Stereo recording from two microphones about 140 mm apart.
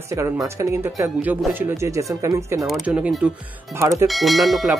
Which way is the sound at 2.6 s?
5° right (ahead or behind).